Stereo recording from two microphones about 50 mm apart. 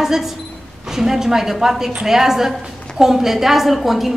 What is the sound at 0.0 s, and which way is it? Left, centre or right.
A woman's voice, centre.